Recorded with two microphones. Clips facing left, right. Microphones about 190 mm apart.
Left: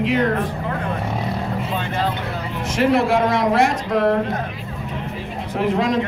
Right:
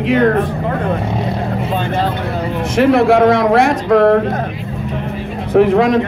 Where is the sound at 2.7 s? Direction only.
60° right (ahead or behind).